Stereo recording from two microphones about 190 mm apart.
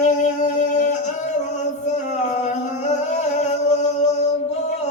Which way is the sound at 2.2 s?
40° left (ahead or behind).